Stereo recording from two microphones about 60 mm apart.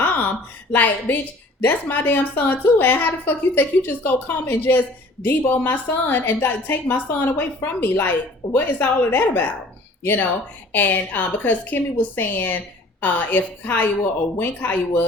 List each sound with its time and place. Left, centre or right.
0.7 s a woman's voice: left